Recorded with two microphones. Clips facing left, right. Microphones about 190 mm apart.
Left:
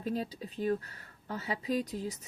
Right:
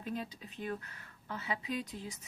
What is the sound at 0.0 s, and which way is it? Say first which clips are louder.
Speech: left 5 dB; 35° left (ahead or behind).